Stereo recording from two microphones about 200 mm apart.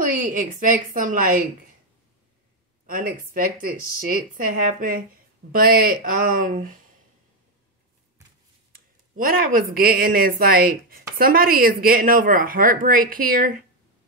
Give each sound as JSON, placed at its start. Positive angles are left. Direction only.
{"t": 0.2, "sound": "a woman's voice", "side_deg": -40}
{"t": 2.9, "sound": "speech", "side_deg": -45}
{"t": 8.7, "sound": "speech", "side_deg": -45}